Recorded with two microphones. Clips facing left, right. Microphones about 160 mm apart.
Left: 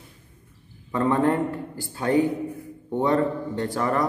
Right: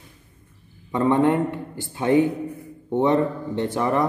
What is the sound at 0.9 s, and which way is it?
A man's voice, 20° right (ahead or behind).